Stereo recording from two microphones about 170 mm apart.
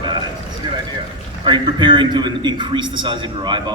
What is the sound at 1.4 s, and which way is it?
A man's voice, 25° right (ahead or behind).